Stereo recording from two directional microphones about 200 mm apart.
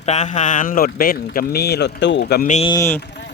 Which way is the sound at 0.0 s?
35° left (ahead or behind).